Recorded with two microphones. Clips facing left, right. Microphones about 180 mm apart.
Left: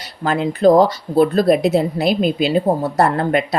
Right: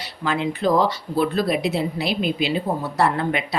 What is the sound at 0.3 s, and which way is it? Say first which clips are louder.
Speech: left 7 dB; 40° left (ahead or behind).